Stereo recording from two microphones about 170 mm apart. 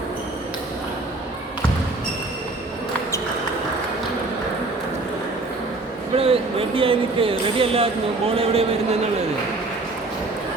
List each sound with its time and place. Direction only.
6.1 s a man's voice: 35° right (ahead or behind)